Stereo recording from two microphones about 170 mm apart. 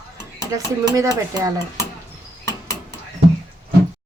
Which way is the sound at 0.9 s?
20° right (ahead or behind).